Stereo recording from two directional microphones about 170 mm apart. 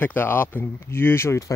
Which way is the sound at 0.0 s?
10° left (ahead or behind).